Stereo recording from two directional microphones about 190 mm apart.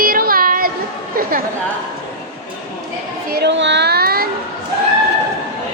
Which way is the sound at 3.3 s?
65° right (ahead or behind).